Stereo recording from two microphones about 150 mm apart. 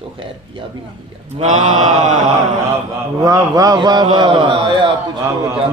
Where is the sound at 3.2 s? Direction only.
25° right (ahead or behind).